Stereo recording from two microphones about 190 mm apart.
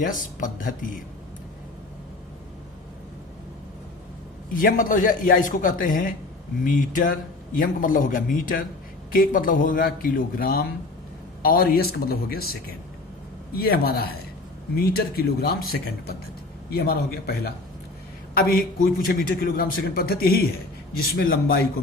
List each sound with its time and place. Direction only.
0.0 s a man's voice: 45° left (ahead or behind)
4.5 s a man's voice: 45° left (ahead or behind)
13.6 s a man's voice: 50° left (ahead or behind)